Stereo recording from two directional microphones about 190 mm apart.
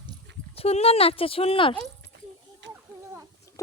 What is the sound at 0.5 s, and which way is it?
Speech, 30° left (ahead or behind).